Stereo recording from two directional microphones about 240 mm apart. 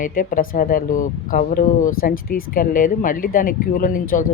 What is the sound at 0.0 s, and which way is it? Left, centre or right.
Speech, left.